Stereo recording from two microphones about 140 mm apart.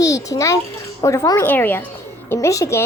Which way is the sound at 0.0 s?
25° left (ahead or behind).